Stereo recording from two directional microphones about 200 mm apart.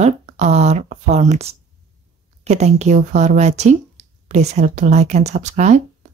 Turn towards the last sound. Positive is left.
turn(degrees=-35)  # may be behind; listen again after turning